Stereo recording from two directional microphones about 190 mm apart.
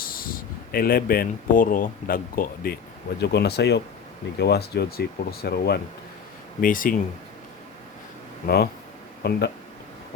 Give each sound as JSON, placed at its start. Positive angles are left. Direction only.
{"t": 0.0, "sound": "speech", "side_deg": 50}
{"t": 3.2, "sound": "speech", "side_deg": 60}
{"t": 8.4, "sound": "speech", "side_deg": 55}